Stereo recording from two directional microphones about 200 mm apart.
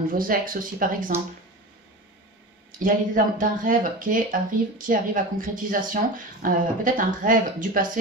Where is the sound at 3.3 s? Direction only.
40° right (ahead or behind).